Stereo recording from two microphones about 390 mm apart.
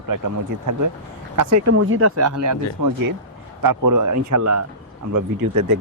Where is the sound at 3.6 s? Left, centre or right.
Right.